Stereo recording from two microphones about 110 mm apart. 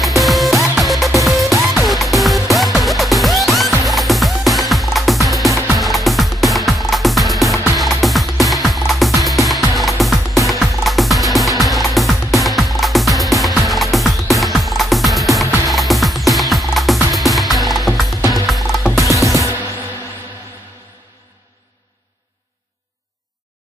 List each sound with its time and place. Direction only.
0.0 s music: centre (ahead or behind)
19.2 s music: 30° right (ahead or behind)